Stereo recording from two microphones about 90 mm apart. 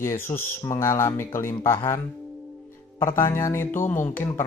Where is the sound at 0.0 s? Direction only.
25° left (ahead or behind).